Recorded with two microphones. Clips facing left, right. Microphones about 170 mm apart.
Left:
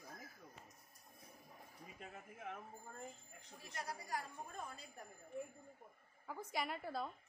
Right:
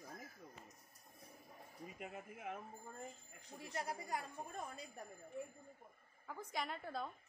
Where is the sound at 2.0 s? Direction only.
10° right (ahead or behind).